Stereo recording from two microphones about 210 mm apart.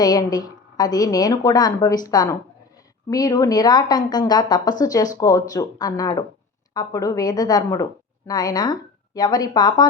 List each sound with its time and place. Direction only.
0.0 s a woman's voice: 20° left (ahead or behind)